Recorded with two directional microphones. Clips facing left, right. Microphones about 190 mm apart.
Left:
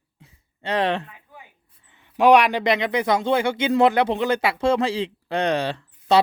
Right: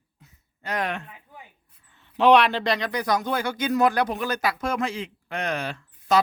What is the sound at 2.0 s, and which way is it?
Speech, 10° left (ahead or behind).